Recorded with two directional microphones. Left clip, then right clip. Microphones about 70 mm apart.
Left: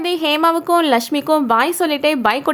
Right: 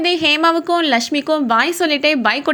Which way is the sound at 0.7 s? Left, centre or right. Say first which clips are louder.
Left 1 dB; left.